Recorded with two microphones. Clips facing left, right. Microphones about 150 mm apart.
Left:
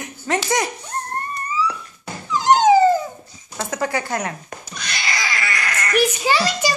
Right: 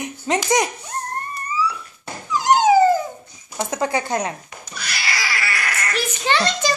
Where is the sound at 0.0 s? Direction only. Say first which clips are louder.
Right 1 dB; 20° right (ahead or behind).